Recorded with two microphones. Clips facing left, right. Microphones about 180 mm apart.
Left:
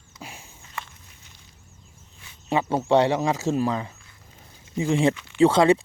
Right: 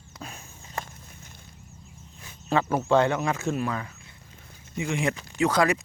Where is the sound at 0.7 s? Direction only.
45° right (ahead or behind).